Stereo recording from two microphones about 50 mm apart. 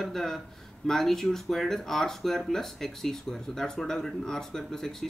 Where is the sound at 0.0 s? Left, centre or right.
Centre.